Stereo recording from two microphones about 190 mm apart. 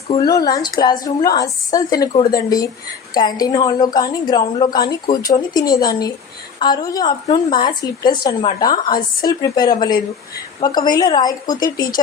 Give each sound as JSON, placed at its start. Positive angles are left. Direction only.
{"t": 0.1, "sound": "a woman's voice", "side_deg": 20}